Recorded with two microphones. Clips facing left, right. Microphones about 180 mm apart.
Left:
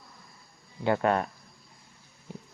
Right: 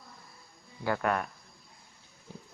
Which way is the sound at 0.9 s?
25° left (ahead or behind).